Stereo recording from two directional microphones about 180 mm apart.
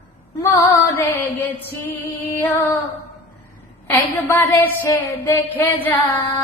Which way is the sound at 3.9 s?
10° left (ahead or behind).